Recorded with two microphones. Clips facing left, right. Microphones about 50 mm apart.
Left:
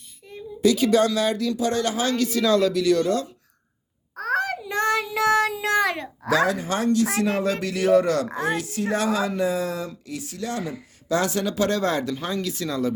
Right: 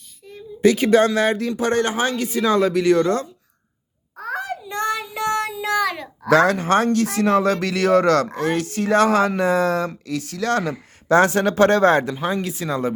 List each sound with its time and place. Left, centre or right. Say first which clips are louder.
0.6 s speech: right 4 dB; right
5.1 s child singing: left 3 dB; left
5.5 s child singing: right 1 dB; left
6.2 s speech: right 6 dB; right
11.1 s speech: right 7 dB; right
12.1 s speech: right 5 dB; centre
12.4 s speech: right 2 dB; right